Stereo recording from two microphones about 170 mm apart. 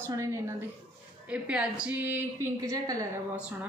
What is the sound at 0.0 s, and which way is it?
A woman's voice, 20° right (ahead or behind).